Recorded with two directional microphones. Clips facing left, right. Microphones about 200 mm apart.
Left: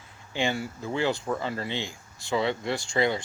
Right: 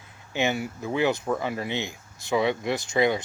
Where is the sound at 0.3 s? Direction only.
20° right (ahead or behind).